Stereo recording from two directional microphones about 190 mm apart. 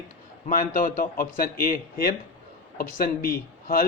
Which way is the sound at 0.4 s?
45° left (ahead or behind).